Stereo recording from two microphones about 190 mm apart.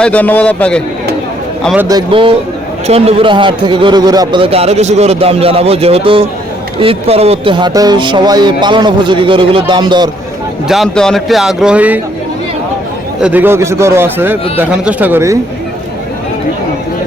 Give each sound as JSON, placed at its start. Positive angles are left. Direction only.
{"t": 0.0, "sound": "a man's voice", "side_deg": 10}
{"t": 1.6, "sound": "a man's voice", "side_deg": -5}
{"t": 1.9, "sound": "a man's voice", "side_deg": -25}
{"t": 10.7, "sound": "speech", "side_deg": 0}
{"t": 13.2, "sound": "a man's voice", "side_deg": -10}